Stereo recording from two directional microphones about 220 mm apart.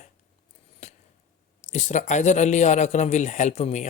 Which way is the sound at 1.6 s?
30° left (ahead or behind).